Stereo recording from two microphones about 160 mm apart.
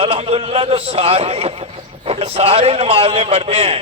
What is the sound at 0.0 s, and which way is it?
A man's voice, 40° right (ahead or behind).